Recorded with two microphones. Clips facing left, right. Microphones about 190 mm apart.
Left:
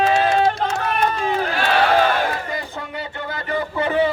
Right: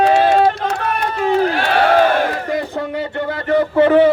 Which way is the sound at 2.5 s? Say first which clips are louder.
Right 8 dB; 60° right (ahead or behind).